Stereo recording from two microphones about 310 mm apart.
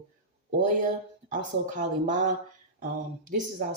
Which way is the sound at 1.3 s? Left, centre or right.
Right.